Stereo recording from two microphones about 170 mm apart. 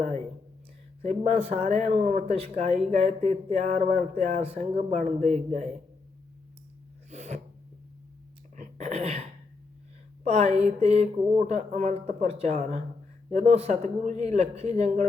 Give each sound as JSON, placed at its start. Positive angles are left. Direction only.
{"t": 1.0, "sound": "speech", "side_deg": -40}
{"t": 7.1, "sound": "sneeze", "side_deg": -40}
{"t": 8.5, "sound": "a sound", "side_deg": -45}
{"t": 10.2, "sound": "speech", "side_deg": -40}